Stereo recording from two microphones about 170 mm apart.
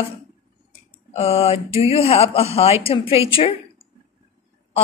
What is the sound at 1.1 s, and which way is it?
Speech, 35° left (ahead or behind).